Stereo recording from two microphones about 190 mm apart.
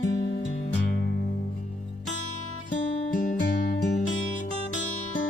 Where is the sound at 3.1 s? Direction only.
45° left (ahead or behind).